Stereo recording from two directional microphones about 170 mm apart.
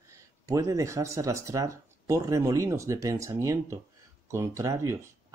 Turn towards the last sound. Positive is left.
turn(degrees=-20)  # may be behind; listen again after turning